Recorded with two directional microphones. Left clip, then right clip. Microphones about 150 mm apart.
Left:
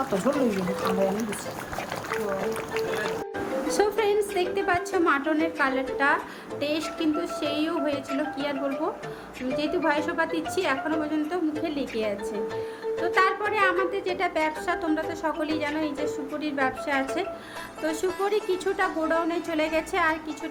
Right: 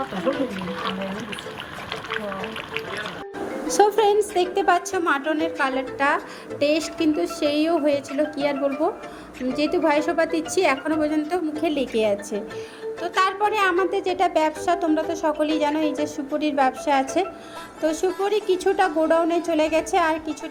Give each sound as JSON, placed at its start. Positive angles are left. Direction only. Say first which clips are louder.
{"t": 3.7, "sound": "a woman's voice", "louder": "right 7 dB", "side_deg": -30}
{"t": 9.6, "sound": "a woman's voice", "louder": "right 5 dB", "side_deg": -30}
{"t": 13.0, "sound": "a woman's voice", "louder": "right 2 dB", "side_deg": -25}